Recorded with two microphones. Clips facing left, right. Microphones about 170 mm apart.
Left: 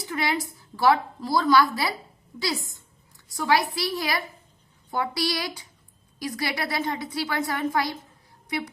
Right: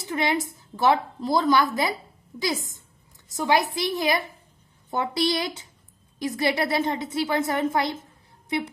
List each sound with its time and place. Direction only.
0.0 s a woman's voice: 20° right (ahead or behind)